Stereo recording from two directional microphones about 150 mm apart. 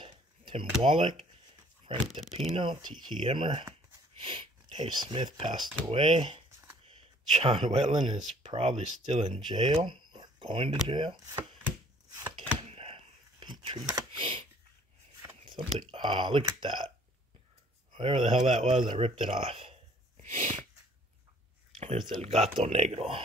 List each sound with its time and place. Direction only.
0.0 s a sound: 35° right (ahead or behind)
1.9 s speech: 40° right (ahead or behind)
6.9 s a sound: 40° right (ahead or behind)
7.9 s speech: 30° right (ahead or behind)
12.6 s a sound: 40° right (ahead or behind)
15.4 s speech: 35° right (ahead or behind)
17.9 s speech: 35° right (ahead or behind)
20.2 s sneeze: 55° right (ahead or behind)
22.0 s speech: 40° right (ahead or behind)